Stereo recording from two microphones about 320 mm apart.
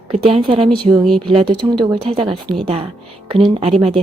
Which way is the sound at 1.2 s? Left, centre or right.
Centre.